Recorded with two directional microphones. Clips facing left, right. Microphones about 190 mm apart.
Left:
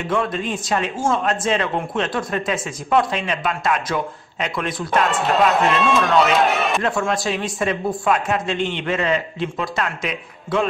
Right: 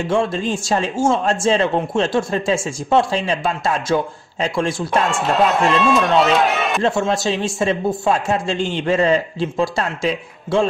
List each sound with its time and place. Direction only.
0.0 s speech: 30° right (ahead or behind)
5.0 s speech: centre (ahead or behind)
6.8 s speech: 25° right (ahead or behind)